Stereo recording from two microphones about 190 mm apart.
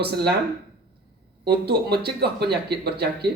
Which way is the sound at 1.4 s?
60° right (ahead or behind).